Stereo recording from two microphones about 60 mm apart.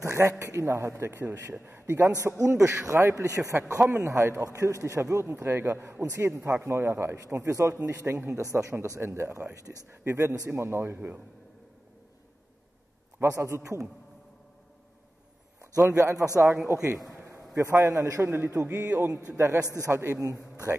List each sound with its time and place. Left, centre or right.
0.0 s a man's voice: right
5.2 s a man's voice: right
8.0 s a man's voice: right
8.4 s a man's voice: right
13.2 s a man's voice: right
15.6 s a man's voice: right
16.3 s a man's voice: right
16.7 s a sound: right
17.6 s a man's voice: right
18.7 s a man's voice: right
19.3 s a man's voice: right
19.6 s a man's voice: left
19.9 s a man's voice: right
20.2 s speech: right